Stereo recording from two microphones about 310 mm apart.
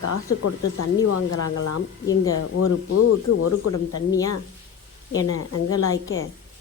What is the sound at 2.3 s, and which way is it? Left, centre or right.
Speech, left.